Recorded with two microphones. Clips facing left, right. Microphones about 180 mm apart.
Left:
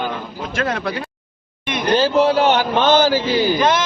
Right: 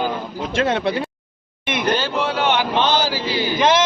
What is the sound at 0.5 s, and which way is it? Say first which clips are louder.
Speech: right 3 dB; 25° right (ahead or behind).